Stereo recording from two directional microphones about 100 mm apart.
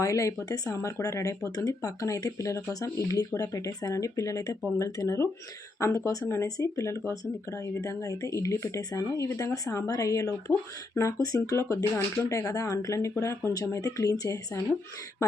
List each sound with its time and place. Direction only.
0.0 s speech: 35° left (ahead or behind)